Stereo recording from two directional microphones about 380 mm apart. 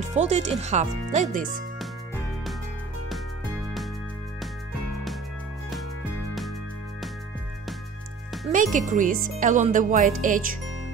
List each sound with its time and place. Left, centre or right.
0.1 s speech: centre
8.7 s speech: centre